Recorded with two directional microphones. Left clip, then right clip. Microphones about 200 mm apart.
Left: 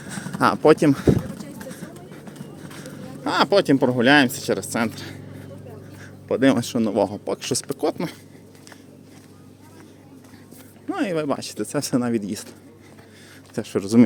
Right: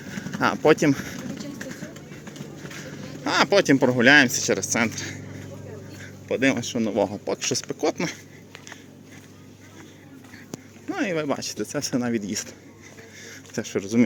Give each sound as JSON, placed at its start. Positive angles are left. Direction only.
{"t": 0.1, "sound": "speech", "side_deg": 20}
{"t": 3.2, "sound": "speech", "side_deg": 10}
{"t": 6.2, "sound": "speech", "side_deg": 15}
{"t": 6.5, "sound": "speech", "side_deg": 30}
{"t": 10.9, "sound": "speech", "side_deg": 15}
{"t": 13.6, "sound": "speech", "side_deg": 20}